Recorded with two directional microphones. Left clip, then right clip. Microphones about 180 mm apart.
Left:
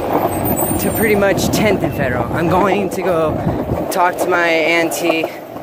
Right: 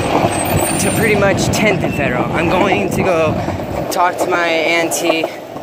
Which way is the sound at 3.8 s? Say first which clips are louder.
Right 1 dB; 35° left (ahead or behind).